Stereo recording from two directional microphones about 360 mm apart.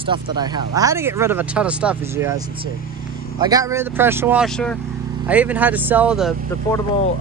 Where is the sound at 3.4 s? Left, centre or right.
Centre.